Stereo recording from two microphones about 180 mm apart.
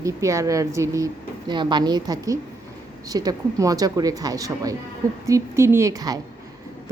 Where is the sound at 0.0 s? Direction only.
15° right (ahead or behind).